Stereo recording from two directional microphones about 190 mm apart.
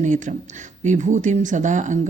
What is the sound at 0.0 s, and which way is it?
Speech, 40° right (ahead or behind).